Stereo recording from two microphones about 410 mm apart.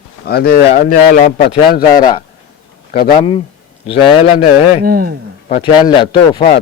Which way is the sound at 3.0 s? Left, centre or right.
Centre.